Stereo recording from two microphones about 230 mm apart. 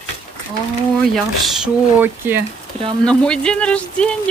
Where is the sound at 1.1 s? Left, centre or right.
Centre.